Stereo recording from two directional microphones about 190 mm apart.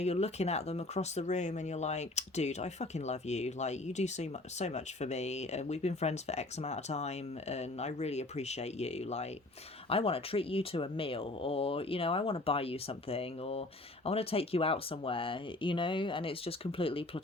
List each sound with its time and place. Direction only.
0.0 s speech: 35° left (ahead or behind)